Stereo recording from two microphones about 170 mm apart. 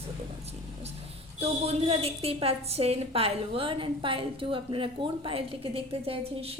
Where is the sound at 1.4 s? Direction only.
35° right (ahead or behind).